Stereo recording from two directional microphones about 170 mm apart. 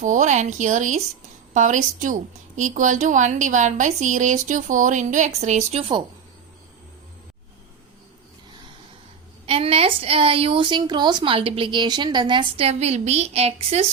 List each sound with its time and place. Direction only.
0.0 s a woman's voice: 45° right (ahead or behind)
9.5 s a woman's voice: 35° right (ahead or behind)